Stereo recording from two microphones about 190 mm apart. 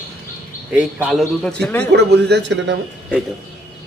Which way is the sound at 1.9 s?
60° right (ahead or behind).